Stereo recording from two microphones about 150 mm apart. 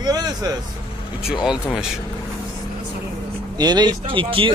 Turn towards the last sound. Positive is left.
turn(degrees=-35)  # may be behind; listen again after turning